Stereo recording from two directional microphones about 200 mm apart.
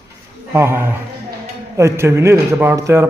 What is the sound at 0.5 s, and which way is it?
Speech, 10° right (ahead or behind).